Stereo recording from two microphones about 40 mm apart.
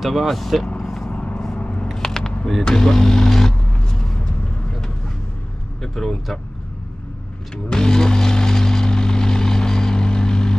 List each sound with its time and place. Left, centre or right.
0.0 s speech: centre
0.8 s vehicle: centre
1.1 s vehicle: left
1.6 s a sound: left
2.0 s a sound: centre
2.6 s speech: centre
3.8 s vehicle: centre
5.8 s speech: centre
7.5 s vehicle: centre